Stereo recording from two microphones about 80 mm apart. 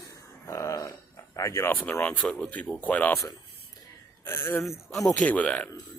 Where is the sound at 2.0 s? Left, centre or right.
Centre.